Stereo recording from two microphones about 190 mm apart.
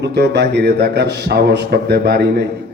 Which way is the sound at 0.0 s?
60° right (ahead or behind).